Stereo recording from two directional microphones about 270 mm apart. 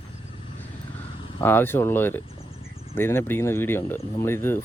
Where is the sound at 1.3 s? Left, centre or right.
Centre.